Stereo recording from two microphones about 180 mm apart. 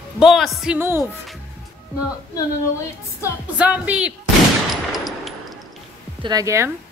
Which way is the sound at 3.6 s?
5° right (ahead or behind).